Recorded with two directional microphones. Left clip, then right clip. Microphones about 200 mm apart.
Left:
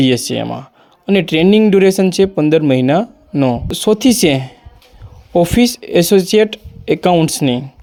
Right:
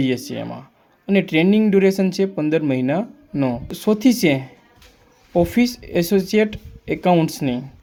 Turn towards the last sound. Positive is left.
turn(degrees=40)  # may be behind; listen again after turning